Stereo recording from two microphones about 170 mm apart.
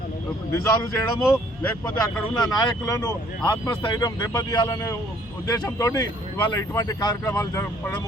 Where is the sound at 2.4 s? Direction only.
25° left (ahead or behind).